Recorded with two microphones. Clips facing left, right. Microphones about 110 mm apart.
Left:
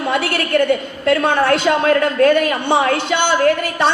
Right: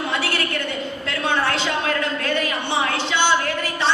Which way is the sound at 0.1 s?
50° left (ahead or behind).